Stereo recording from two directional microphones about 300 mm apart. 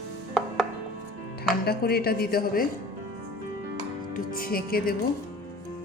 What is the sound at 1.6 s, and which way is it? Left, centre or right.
A woman's voice, left.